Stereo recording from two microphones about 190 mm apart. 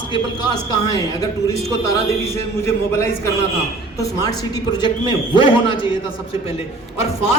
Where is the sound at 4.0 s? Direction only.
20° left (ahead or behind).